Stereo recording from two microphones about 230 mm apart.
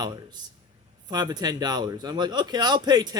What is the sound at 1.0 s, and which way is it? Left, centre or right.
A man's voice, centre.